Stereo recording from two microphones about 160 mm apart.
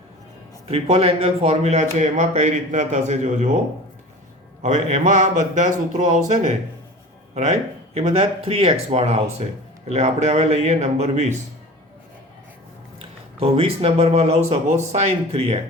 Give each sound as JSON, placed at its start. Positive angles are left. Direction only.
{"t": 0.7, "sound": "a man's voice", "side_deg": -40}
{"t": 4.6, "sound": "a man's voice", "side_deg": -50}
{"t": 13.4, "sound": "a man's voice", "side_deg": -40}